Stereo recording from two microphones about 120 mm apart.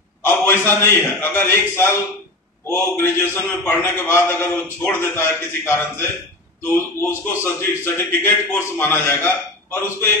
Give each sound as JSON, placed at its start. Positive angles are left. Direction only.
{"t": 0.2, "sound": "a man's voice", "side_deg": 20}